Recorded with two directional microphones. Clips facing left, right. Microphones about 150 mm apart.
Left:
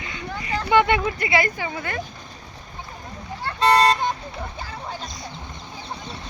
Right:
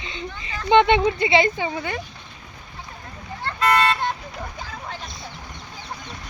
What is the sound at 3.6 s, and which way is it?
Vehicle, 35° left (ahead or behind).